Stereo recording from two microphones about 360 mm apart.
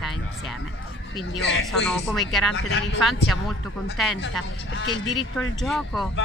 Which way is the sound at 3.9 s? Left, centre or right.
Centre.